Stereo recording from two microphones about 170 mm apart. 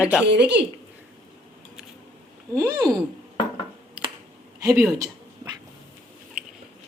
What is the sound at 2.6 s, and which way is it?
Speech, 20° right (ahead or behind).